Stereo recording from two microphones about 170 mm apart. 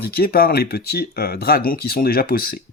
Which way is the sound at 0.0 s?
60° left (ahead or behind).